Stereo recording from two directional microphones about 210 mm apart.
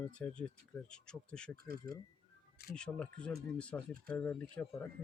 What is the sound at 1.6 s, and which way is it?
Speech, 45° right (ahead or behind).